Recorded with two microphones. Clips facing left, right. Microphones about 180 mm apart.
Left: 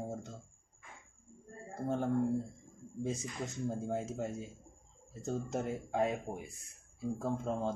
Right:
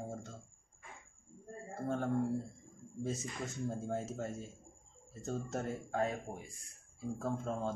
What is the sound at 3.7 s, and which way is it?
Speech, 10° left (ahead or behind).